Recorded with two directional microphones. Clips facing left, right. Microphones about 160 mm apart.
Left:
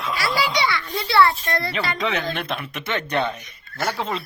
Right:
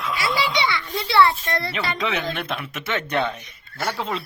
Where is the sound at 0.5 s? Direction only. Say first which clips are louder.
Left 1 dB; 20° right (ahead or behind).